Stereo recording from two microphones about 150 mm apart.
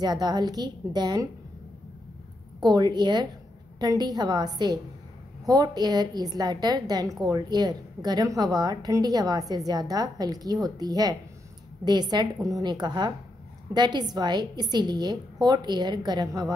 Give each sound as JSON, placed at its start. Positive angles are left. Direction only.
{"t": 0.0, "sound": "a woman's voice", "side_deg": -30}
{"t": 2.6, "sound": "a woman's voice", "side_deg": -30}